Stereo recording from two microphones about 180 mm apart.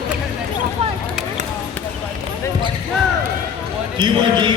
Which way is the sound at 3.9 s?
25° right (ahead or behind).